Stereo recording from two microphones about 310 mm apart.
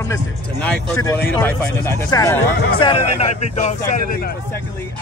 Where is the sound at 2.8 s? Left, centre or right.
Left.